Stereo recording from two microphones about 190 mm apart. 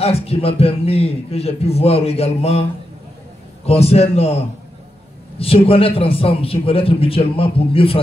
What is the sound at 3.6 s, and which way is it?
A man's voice, 35° left (ahead or behind).